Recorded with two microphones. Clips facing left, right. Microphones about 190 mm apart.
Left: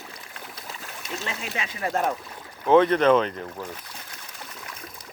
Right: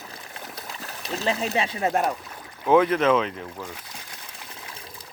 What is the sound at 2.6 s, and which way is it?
Speech, 5° right (ahead or behind).